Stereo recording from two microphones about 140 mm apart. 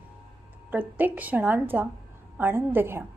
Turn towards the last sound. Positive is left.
turn(degrees=-15)  # may be behind; listen again after turning